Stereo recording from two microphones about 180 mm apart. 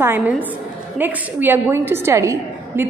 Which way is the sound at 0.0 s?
10° right (ahead or behind).